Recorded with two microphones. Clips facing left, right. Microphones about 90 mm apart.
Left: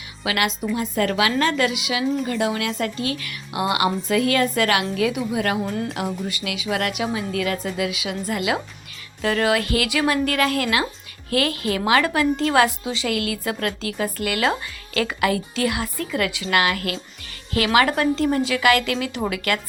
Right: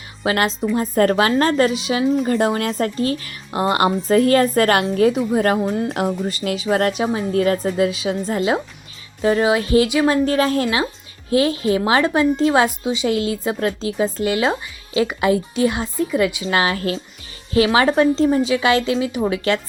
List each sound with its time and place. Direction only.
0.2 s a woman's voice: 35° right (ahead or behind)
5.6 s a woman's voice: 25° right (ahead or behind)
6.2 s a woman's voice: 40° right (ahead or behind)